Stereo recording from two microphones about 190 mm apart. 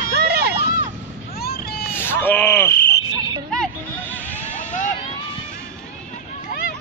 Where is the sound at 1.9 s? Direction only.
10° left (ahead or behind).